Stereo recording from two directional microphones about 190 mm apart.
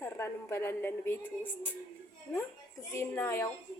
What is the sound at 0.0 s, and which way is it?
A woman's voice, 15° left (ahead or behind).